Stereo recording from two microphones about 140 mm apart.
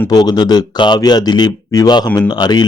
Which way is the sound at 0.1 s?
30° left (ahead or behind).